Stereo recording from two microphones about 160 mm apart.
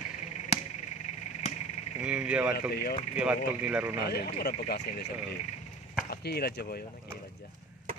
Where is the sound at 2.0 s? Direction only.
5° right (ahead or behind).